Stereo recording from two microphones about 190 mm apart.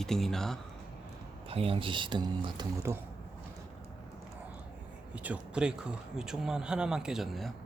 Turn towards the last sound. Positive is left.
turn(degrees=0)  # may be behind; listen again after turning